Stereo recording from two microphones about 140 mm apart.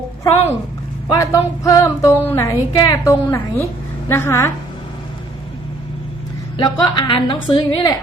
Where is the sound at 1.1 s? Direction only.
25° left (ahead or behind).